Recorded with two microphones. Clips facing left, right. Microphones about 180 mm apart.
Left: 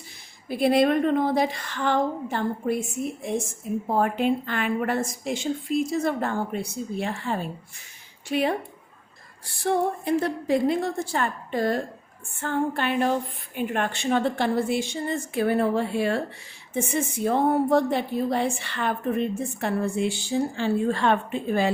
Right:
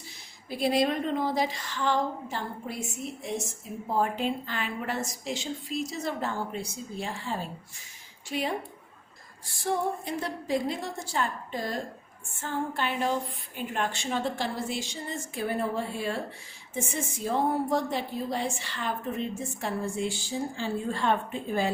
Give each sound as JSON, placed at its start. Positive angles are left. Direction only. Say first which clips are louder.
{"t": 0.5, "sound": "a woman's voice", "louder": "left 6 dB", "side_deg": 60}
{"t": 9.6, "sound": "a woman's voice", "louder": "left 6 dB", "side_deg": 60}